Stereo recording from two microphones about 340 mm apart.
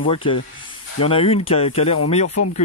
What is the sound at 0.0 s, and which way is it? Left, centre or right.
Speech, centre.